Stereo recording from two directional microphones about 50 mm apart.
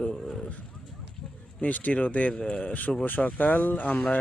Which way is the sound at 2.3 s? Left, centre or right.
Centre.